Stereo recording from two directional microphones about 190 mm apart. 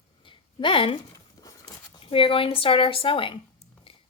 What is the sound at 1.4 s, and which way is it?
Speech, 25° left (ahead or behind).